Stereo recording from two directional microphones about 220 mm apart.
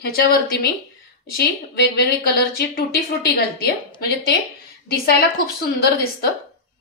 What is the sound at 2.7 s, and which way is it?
A woman's voice, 45° left (ahead or behind).